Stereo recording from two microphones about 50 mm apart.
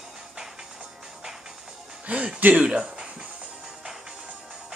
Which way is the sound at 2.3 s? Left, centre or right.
Right.